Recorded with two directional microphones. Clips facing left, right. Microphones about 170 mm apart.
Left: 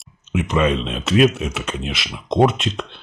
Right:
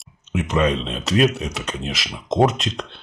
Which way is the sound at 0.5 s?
5° left (ahead or behind).